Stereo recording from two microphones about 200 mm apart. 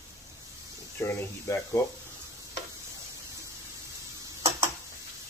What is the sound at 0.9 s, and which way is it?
Speech, 10° left (ahead or behind).